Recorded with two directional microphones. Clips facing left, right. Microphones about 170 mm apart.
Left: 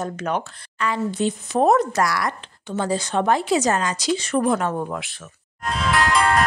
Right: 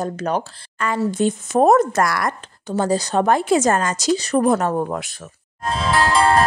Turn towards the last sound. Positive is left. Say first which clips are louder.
# right 3 dB
turn(degrees=-30)  # may be behind; listen again after turning